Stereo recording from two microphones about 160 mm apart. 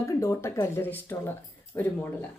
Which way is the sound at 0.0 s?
20° left (ahead or behind).